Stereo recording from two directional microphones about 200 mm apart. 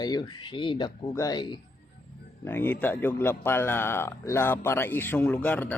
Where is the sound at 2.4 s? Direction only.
10° left (ahead or behind).